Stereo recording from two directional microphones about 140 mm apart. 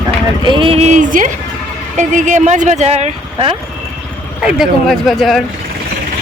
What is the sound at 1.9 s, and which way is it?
Speech, 60° right (ahead or behind).